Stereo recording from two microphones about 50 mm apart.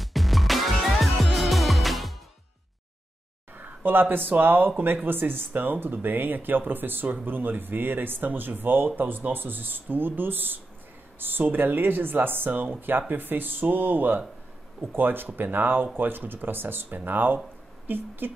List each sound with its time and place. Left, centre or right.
0.0 s music: centre
3.5 s speech: right